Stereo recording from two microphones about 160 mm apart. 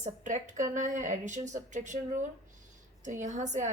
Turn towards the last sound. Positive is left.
turn(degrees=-50)  # may be behind; listen again after turning